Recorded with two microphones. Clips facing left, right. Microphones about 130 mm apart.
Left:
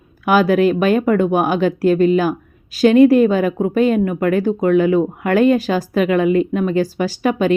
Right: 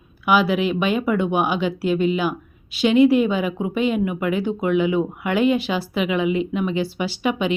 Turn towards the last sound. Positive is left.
turn(degrees=40)  # may be behind; listen again after turning